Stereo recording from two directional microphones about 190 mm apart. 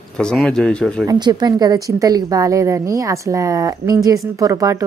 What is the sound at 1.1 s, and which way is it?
A woman's voice, 20° right (ahead or behind).